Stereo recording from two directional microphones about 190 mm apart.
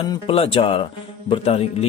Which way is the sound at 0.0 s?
25° left (ahead or behind).